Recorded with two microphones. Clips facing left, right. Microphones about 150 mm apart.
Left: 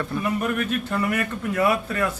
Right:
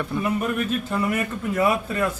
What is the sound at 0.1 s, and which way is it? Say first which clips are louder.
A man's voice: right 1 dB; 20° right (ahead or behind).